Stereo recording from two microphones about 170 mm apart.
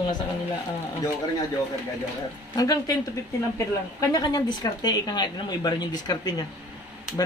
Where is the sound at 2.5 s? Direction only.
20° left (ahead or behind).